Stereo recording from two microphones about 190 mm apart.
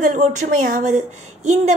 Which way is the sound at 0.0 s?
40° right (ahead or behind).